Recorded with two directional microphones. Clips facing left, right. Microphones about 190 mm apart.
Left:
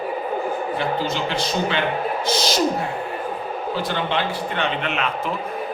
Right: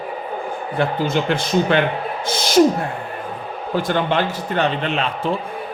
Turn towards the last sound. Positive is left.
turn(degrees=-30)  # may be behind; listen again after turning